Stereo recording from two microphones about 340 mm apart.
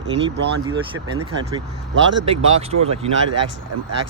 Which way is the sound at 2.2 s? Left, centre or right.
Centre.